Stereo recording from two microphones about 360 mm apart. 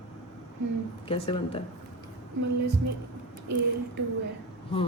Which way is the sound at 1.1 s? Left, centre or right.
Centre.